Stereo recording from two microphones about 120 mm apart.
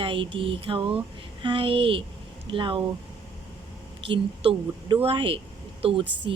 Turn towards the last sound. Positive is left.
turn(degrees=-50)  # may be behind; listen again after turning